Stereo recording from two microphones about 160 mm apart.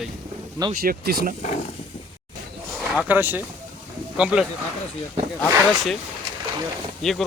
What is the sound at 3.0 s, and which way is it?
Speech, 10° right (ahead or behind).